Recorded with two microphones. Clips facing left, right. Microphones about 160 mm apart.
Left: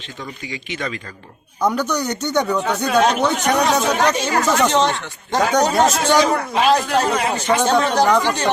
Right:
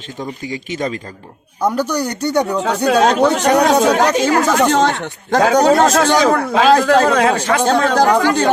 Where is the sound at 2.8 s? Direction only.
90° right.